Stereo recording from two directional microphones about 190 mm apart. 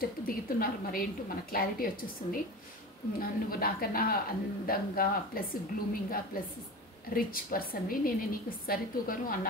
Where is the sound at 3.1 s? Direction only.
50° left (ahead or behind).